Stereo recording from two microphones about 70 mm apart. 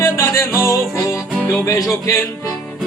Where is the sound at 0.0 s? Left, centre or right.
Left.